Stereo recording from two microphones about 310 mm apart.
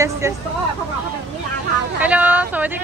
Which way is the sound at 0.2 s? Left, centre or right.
Centre.